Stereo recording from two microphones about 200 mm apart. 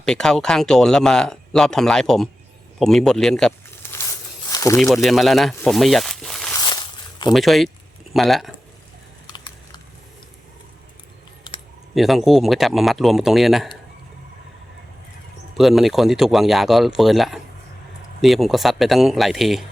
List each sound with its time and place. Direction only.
0.0 s speech: 5° left (ahead or behind)
3.9 s a sound: 15° left (ahead or behind)
5.0 s speech: centre (ahead or behind)
6.6 s walk: 20° left (ahead or behind)
7.3 s speech: centre (ahead or behind)
9.2 s a sound: 20° left (ahead or behind)
11.9 s speech: centre (ahead or behind)
15.5 s speech: centre (ahead or behind)